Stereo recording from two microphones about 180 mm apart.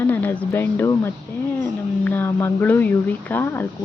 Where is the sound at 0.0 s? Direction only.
10° left (ahead or behind).